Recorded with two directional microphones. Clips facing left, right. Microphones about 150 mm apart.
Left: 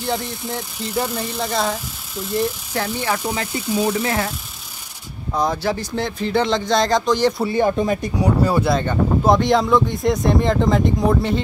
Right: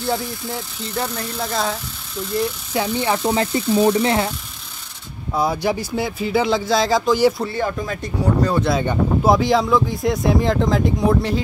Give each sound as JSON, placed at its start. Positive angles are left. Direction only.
{"t": 0.0, "sound": "speech", "side_deg": 0}
{"t": 2.7, "sound": "speech", "side_deg": -15}
{"t": 3.3, "sound": "speech", "side_deg": -30}
{"t": 5.3, "sound": "speech", "side_deg": -10}
{"t": 7.4, "sound": "speech", "side_deg": 20}
{"t": 8.7, "sound": "speech", "side_deg": -5}